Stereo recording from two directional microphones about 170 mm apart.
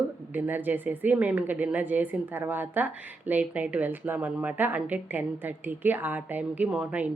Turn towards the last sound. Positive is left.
turn(degrees=-5)  # may be behind; listen again after turning